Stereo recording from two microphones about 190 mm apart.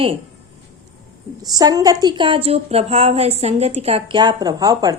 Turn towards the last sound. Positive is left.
turn(degrees=-20)  # may be behind; listen again after turning